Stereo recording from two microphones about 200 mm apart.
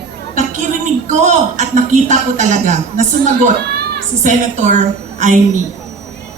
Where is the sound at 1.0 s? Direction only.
35° right (ahead or behind).